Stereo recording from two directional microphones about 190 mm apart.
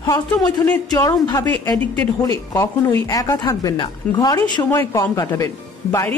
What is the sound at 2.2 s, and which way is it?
A woman's voice, 20° left (ahead or behind).